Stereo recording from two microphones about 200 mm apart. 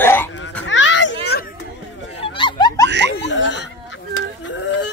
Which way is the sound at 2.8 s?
60° right (ahead or behind).